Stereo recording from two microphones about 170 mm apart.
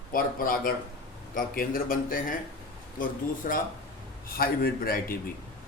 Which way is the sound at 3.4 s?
60° left (ahead or behind).